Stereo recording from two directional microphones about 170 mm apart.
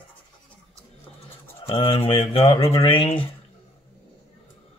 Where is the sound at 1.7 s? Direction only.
35° left (ahead or behind).